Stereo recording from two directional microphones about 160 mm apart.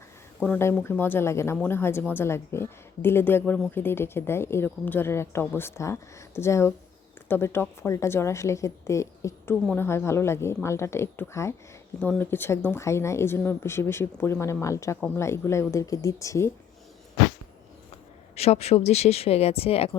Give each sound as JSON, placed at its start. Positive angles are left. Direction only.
{"t": 0.4, "sound": "a woman's voice", "side_deg": 10}
{"t": 18.3, "sound": "speech", "side_deg": 40}